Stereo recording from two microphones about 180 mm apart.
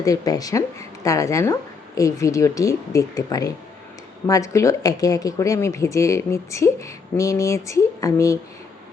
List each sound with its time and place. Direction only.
0.0 s speech: 20° left (ahead or behind)